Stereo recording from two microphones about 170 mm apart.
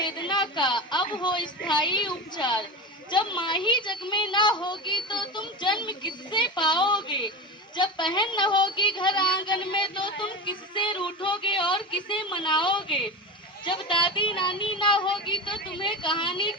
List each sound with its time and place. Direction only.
0.0 s a woman's voice: 25° left (ahead or behind)